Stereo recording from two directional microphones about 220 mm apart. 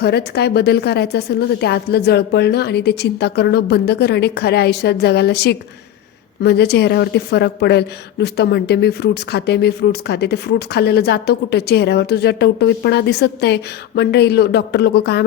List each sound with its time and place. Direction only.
0.0 s a woman's voice: 45° left (ahead or behind)